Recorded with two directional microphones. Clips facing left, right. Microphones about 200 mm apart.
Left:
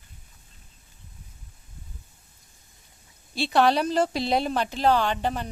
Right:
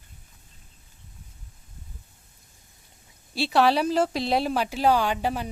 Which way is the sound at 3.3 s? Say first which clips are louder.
Even; 5° right (ahead or behind).